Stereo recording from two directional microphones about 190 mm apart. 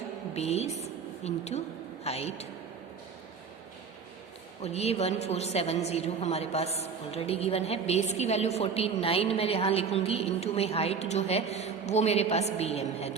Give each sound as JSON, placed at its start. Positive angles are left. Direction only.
{"t": 0.3, "sound": "a woman's voice", "side_deg": 35}
{"t": 4.6, "sound": "a woman's voice", "side_deg": 35}